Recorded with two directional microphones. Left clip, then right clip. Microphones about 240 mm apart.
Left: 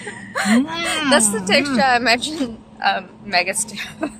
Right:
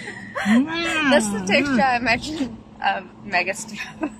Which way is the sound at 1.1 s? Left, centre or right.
Left.